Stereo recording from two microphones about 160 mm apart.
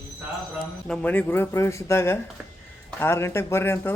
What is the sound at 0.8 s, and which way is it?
A man's voice, 10° left (ahead or behind).